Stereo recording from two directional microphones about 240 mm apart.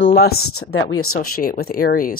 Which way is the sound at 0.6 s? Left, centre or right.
Left.